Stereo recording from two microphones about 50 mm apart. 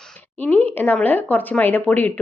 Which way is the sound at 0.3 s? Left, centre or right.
Left.